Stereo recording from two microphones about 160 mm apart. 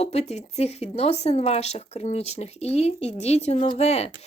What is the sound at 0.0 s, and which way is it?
A woman's voice, 45° left (ahead or behind).